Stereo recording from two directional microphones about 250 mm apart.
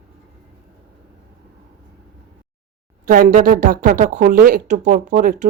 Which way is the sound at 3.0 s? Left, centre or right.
Right.